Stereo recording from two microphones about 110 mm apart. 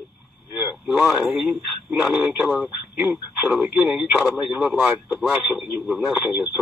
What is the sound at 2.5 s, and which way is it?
Speech, centre (ahead or behind).